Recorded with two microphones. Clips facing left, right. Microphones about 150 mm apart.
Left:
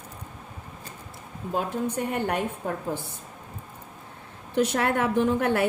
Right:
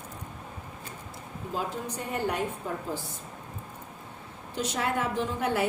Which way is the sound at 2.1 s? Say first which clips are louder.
Even; 60° left (ahead or behind).